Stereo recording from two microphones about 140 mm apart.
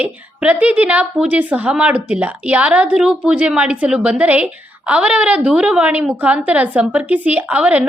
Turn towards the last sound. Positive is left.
turn(degrees=-10)  # may be behind; listen again after turning